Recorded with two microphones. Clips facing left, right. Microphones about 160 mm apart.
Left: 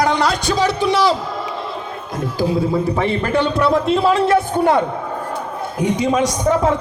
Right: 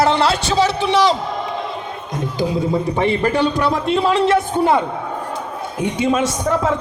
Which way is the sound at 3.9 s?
5° left (ahead or behind).